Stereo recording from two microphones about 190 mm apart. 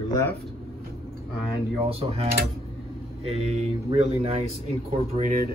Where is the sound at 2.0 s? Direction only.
30° right (ahead or behind).